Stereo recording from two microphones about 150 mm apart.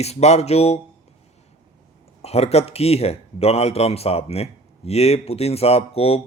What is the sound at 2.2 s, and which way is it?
Speech, 45° left (ahead or behind).